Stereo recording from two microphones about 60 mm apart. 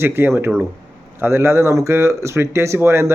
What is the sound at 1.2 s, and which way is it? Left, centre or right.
Speech, right.